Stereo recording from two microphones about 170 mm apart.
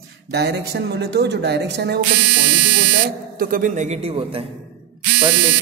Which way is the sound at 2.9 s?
60° right (ahead or behind).